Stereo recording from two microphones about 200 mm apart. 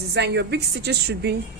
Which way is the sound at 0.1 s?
60° right (ahead or behind).